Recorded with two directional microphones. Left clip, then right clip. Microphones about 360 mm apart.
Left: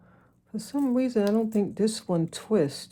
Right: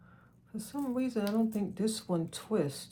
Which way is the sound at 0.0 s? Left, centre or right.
Left.